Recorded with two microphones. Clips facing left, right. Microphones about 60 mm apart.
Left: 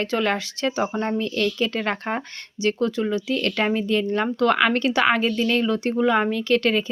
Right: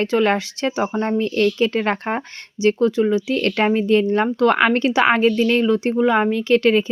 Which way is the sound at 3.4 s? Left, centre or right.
Right.